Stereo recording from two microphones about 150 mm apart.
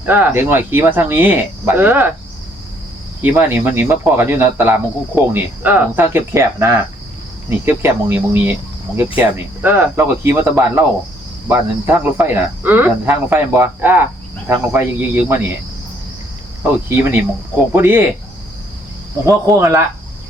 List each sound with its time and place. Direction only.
0.0 s speech: 15° right (ahead or behind)
3.2 s speech: 15° right (ahead or behind)
16.9 s speech: 10° right (ahead or behind)
19.2 s speech: 20° right (ahead or behind)